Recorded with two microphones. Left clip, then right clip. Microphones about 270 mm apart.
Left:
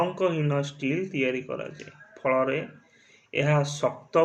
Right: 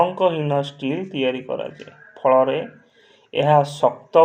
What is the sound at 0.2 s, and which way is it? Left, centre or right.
Speech, right.